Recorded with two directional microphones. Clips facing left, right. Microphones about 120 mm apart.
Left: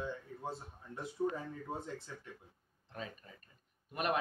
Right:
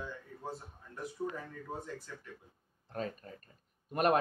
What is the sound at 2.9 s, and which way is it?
Speech, 45° right (ahead or behind).